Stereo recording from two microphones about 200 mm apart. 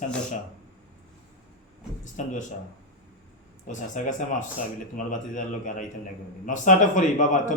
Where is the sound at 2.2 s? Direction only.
40° left (ahead or behind).